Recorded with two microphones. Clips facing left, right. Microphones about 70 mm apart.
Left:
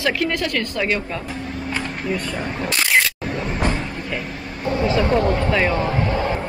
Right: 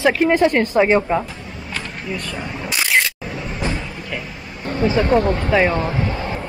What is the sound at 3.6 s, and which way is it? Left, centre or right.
Vehicle, left.